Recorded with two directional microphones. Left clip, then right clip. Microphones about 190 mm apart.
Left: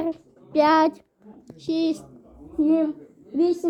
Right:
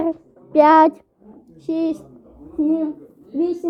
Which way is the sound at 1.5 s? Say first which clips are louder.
Right 2 dB; 5° right (ahead or behind).